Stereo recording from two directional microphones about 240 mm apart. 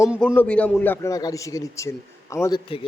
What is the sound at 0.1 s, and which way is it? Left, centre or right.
A man's voice, centre.